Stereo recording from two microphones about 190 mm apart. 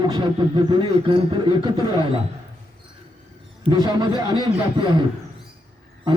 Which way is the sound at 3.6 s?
25° right (ahead or behind).